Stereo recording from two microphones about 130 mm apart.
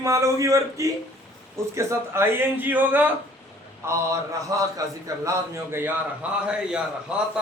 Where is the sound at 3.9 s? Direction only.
25° right (ahead or behind).